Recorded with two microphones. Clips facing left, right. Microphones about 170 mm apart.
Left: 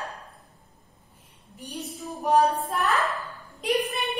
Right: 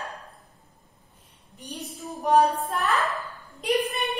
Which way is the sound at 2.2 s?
Centre (ahead or behind).